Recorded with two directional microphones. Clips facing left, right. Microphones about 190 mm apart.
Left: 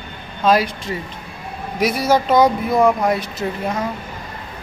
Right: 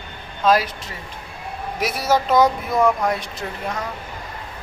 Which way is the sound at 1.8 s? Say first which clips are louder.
Left 4 dB; 5° right (ahead or behind).